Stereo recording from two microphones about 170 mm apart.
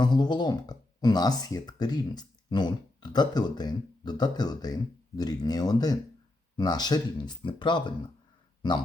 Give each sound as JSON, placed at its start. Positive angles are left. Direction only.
{"t": 0.0, "sound": "speech", "side_deg": 25}